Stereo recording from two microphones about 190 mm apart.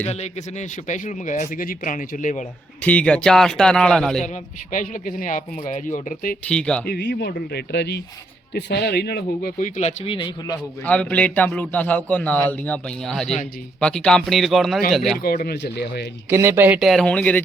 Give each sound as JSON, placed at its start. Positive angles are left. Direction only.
{"t": 0.0, "sound": "speech", "side_deg": 35}
{"t": 2.8, "sound": "a man's voice", "side_deg": 5}
{"t": 4.7, "sound": "speech", "side_deg": 45}
{"t": 6.5, "sound": "a man's voice", "side_deg": 5}
{"t": 6.8, "sound": "a man's voice", "side_deg": 60}
{"t": 10.8, "sound": "a man's voice", "side_deg": 5}
{"t": 15.2, "sound": "speech", "side_deg": 50}
{"t": 16.3, "sound": "a man's voice", "side_deg": -15}